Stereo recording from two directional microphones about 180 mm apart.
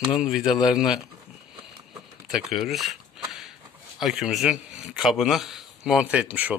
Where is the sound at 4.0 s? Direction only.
Centre (ahead or behind).